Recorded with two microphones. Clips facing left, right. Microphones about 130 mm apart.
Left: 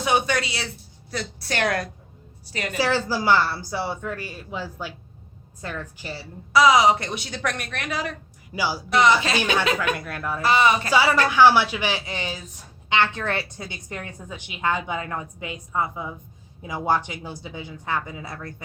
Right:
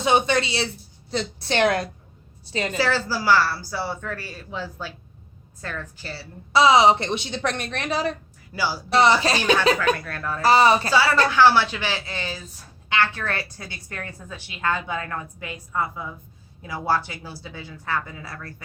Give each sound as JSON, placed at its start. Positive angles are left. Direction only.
{"t": 0.0, "sound": "a woman's voice", "side_deg": -25}
{"t": 2.7, "sound": "speech", "side_deg": 15}
{"t": 6.5, "sound": "a woman's voice", "side_deg": -25}
{"t": 8.5, "sound": "speech", "side_deg": 15}
{"t": 8.9, "sound": "a woman's voice", "side_deg": -35}
{"t": 10.0, "sound": "speech", "side_deg": 15}
{"t": 10.4, "sound": "a woman's voice", "side_deg": -35}
{"t": 10.9, "sound": "a woman's voice", "side_deg": 15}